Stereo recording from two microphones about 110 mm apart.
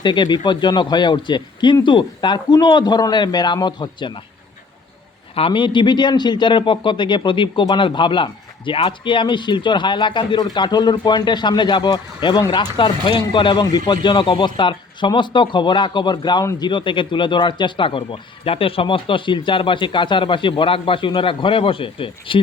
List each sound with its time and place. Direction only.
0.0 s a man's voice: 45° left (ahead or behind)
5.3 s a man's voice: 55° left (ahead or behind)